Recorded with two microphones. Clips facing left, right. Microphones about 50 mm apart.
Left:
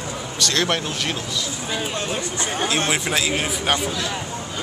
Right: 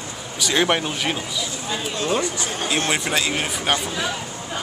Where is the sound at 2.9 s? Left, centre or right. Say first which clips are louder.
Even; centre.